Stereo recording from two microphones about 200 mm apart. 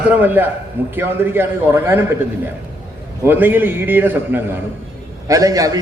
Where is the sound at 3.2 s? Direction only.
10° right (ahead or behind).